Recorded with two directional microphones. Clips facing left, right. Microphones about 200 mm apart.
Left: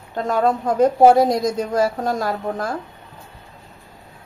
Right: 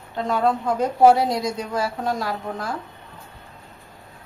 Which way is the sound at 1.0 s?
45° left (ahead or behind).